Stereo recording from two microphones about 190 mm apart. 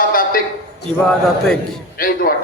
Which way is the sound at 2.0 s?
50° left (ahead or behind).